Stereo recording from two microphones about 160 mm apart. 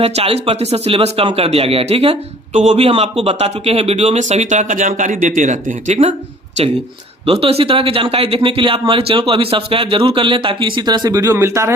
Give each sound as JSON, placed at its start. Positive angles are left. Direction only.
{"t": 0.0, "sound": "speech", "side_deg": -40}
{"t": 7.3, "sound": "speech", "side_deg": -35}